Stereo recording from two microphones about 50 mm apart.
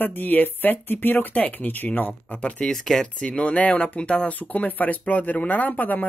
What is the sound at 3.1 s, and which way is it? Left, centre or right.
Speech, centre.